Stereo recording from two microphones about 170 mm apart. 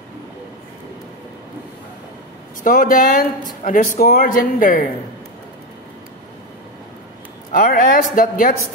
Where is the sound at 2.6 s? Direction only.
50° left (ahead or behind).